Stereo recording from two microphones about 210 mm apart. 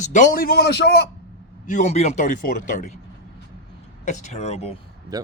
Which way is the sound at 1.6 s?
35° left (ahead or behind).